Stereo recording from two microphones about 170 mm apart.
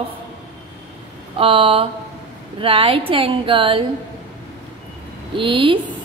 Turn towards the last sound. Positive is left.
turn(degrees=-30)  # may be behind; listen again after turning